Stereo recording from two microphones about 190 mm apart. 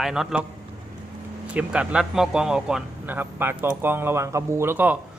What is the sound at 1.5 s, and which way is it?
Speech, 5° right (ahead or behind).